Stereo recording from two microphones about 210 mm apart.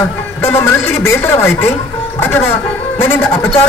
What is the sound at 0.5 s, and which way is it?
A man's voice, 10° left (ahead or behind).